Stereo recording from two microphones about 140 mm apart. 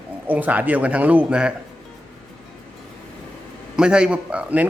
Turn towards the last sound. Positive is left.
turn(degrees=-10)  # may be behind; listen again after turning